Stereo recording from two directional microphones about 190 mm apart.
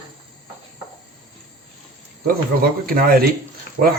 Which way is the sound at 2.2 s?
50° right (ahead or behind).